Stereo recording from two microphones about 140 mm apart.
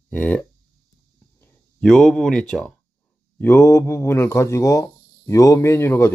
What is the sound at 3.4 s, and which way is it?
Speech, 20° left (ahead or behind).